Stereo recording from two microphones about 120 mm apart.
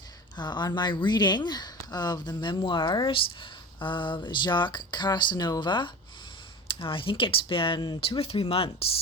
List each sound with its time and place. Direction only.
0.3 s speech: 40° left (ahead or behind)
8.0 s speech: 50° left (ahead or behind)